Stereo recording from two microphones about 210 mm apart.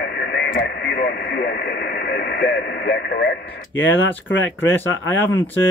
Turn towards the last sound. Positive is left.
turn(degrees=10)  # may be behind; listen again after turning